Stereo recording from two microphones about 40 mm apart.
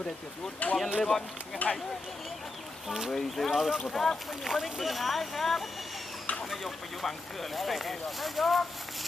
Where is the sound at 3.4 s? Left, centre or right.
Centre.